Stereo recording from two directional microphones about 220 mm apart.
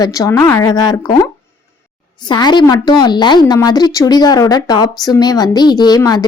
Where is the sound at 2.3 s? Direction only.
20° left (ahead or behind).